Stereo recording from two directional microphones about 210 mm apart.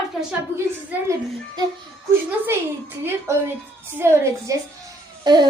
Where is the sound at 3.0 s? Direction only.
10° right (ahead or behind).